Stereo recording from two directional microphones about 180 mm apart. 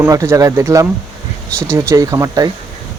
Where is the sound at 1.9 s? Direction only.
15° right (ahead or behind).